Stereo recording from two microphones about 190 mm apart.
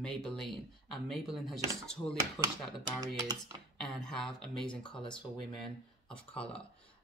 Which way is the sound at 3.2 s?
20° right (ahead or behind).